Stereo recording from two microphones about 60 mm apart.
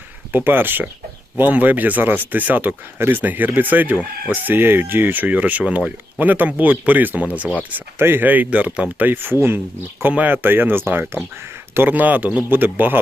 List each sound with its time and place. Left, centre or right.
0.3 s speech: right
7.9 s speech: right
9.0 s speech: right
10.0 s speech: right